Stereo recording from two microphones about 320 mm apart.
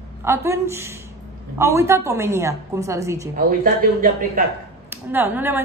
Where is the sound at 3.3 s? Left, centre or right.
Right.